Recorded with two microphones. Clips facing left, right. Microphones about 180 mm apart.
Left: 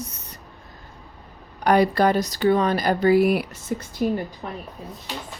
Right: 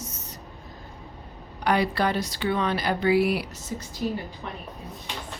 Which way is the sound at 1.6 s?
45° left (ahead or behind).